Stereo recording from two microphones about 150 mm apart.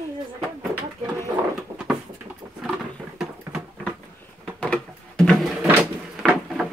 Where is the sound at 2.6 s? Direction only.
Centre (ahead or behind).